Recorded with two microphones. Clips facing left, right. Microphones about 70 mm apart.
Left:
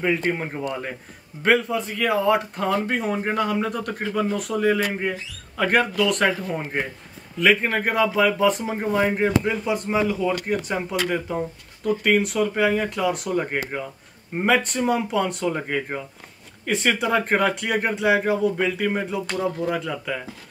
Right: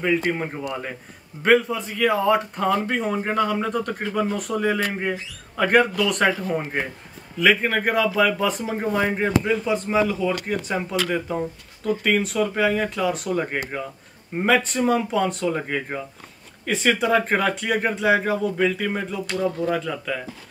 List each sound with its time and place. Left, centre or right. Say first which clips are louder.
0.0 s a man's voice: right 1 dB; centre